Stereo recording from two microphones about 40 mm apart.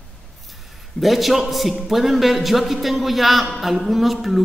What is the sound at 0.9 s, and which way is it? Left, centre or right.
A woman's voice, centre.